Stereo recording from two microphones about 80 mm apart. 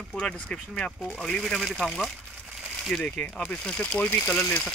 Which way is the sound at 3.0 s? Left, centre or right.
Centre.